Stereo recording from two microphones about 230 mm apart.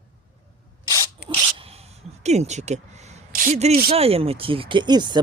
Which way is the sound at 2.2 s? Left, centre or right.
Right.